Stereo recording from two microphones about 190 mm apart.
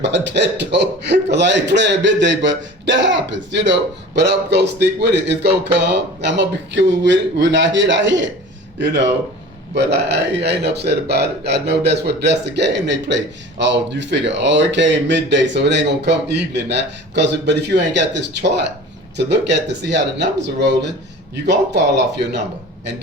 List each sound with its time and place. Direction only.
0.0 s a man's voice: 70° right (ahead or behind)
9.7 s a man's voice: 65° right (ahead or behind)